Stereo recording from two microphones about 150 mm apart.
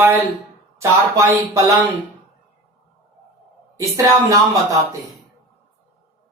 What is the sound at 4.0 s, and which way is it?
Speech, 20° right (ahead or behind).